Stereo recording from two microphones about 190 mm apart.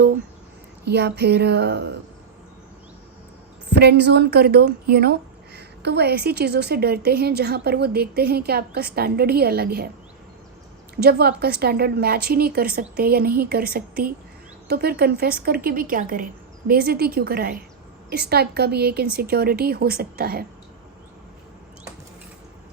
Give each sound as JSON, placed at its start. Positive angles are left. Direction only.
{"t": 0.9, "sound": "a woman's voice", "side_deg": -60}
{"t": 3.7, "sound": "a woman's voice", "side_deg": -60}
{"t": 10.9, "sound": "a woman's voice", "side_deg": -60}